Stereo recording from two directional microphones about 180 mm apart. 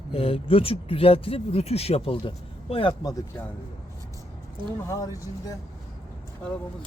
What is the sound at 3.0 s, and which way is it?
Speech, 20° left (ahead or behind).